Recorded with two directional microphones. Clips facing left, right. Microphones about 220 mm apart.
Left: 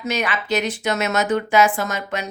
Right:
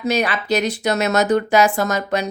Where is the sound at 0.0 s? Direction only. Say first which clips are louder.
Right 4 dB; 35° right (ahead or behind).